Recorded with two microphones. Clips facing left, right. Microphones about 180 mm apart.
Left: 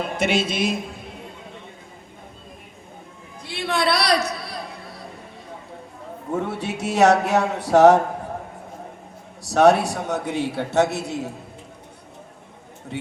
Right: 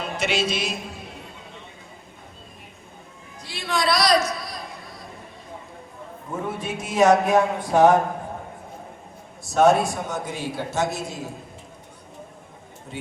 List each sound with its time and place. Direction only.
0.0 s music: 55° left (ahead or behind)
3.4 s a sound: 60° left (ahead or behind)
6.3 s a man's voice: 75° left (ahead or behind)
9.5 s a man's voice: 70° left (ahead or behind)